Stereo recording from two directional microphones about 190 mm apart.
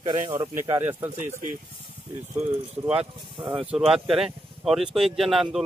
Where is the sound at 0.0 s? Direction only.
25° right (ahead or behind).